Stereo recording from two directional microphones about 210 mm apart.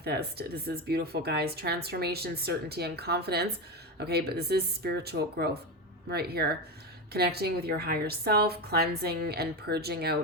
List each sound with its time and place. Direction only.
0.0 s speech: 50° right (ahead or behind)